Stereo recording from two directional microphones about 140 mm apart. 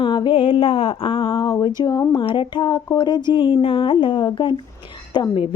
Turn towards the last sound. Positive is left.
turn(degrees=30)  # may be behind; listen again after turning